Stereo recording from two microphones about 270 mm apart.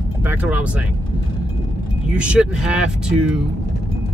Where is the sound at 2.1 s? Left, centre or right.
Centre.